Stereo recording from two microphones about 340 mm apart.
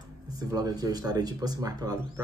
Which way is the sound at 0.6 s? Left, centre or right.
Centre.